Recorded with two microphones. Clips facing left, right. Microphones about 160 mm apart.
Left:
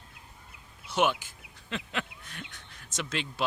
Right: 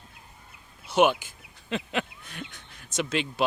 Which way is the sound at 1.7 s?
15° right (ahead or behind).